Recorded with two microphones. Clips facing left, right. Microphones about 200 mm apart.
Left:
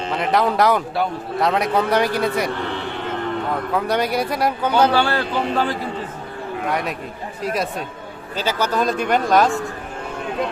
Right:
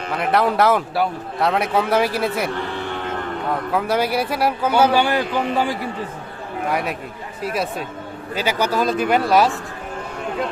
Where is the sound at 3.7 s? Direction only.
5° right (ahead or behind).